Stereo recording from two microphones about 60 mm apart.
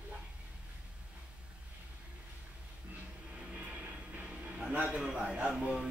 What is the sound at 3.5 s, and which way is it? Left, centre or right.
Music, centre.